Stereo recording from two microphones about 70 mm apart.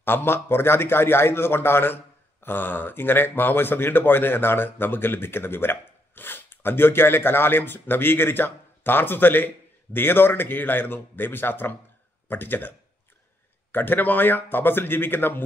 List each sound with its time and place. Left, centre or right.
0.0 s a man's voice: left